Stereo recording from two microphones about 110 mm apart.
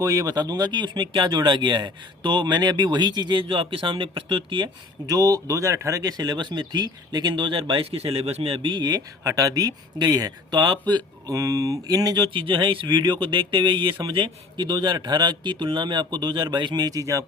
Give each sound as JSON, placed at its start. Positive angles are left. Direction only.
{"t": 0.0, "sound": "speech", "side_deg": -30}